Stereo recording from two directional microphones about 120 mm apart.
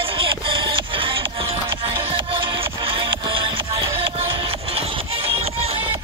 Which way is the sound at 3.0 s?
45° right (ahead or behind).